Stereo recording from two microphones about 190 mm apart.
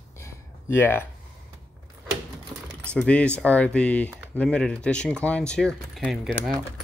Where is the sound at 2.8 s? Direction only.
5° left (ahead or behind).